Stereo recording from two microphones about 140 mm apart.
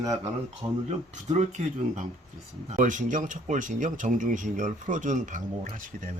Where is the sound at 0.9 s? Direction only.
55° right (ahead or behind).